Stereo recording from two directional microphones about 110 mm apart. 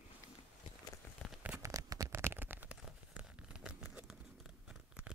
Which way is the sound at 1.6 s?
30° right (ahead or behind).